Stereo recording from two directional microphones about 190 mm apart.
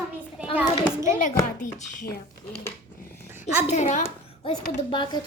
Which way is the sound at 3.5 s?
10° right (ahead or behind).